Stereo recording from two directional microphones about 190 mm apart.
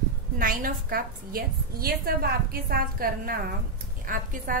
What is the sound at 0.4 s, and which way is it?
A woman's voice, 45° right (ahead or behind).